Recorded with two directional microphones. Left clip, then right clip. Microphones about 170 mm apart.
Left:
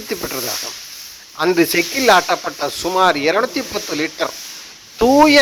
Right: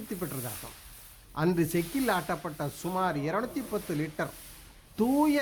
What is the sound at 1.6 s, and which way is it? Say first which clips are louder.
Speech: left 14 dB; 40° left (ahead or behind).